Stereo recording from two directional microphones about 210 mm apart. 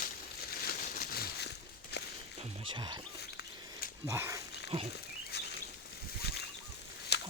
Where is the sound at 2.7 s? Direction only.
20° right (ahead or behind).